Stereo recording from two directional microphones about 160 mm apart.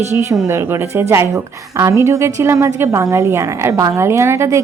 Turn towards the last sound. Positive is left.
turn(degrees=-15)  # may be behind; listen again after turning